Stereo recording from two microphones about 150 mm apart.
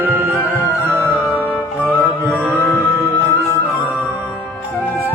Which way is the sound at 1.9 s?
10° right (ahead or behind).